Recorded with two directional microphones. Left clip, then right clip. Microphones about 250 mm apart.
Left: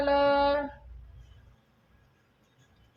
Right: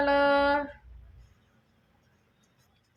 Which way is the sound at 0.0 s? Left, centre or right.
Right.